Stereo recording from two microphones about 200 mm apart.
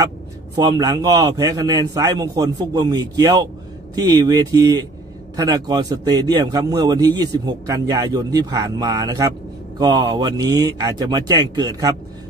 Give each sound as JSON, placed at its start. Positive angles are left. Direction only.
{"t": 0.6, "sound": "a man's voice", "side_deg": -15}